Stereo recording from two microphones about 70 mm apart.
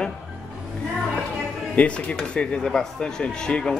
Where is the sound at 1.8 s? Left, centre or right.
Centre.